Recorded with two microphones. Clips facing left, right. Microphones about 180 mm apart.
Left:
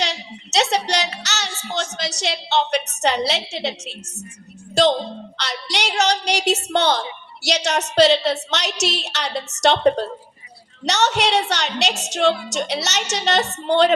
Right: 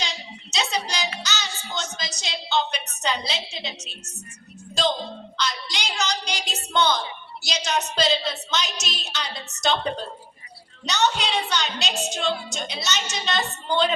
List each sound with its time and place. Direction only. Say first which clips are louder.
0.0 s a sound: left 7 dB; 75° left (ahead or behind)
1.2 s child singing: left 2 dB; 75° left (ahead or behind)
1.6 s a woman's voice: left 6 dB; 55° left (ahead or behind); by 13.9 s 75° left (ahead or behind)